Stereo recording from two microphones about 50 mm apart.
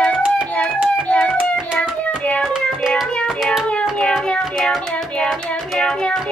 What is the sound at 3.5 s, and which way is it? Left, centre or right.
Music, centre.